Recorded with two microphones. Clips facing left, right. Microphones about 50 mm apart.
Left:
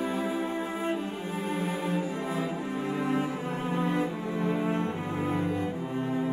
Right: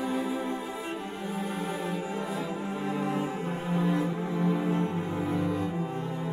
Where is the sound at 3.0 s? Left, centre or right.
Left.